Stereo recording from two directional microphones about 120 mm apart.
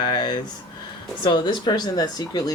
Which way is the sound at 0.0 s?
40° left (ahead or behind).